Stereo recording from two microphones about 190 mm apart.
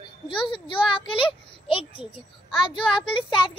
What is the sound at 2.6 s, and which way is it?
Speech, 25° left (ahead or behind).